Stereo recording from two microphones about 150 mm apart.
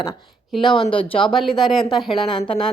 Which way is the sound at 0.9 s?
35° left (ahead or behind).